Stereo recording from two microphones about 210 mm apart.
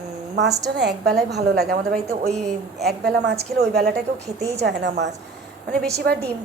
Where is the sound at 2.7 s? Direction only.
50° right (ahead or behind).